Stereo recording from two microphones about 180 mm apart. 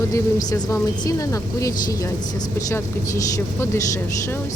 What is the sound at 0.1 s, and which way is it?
A woman's voice, 20° left (ahead or behind).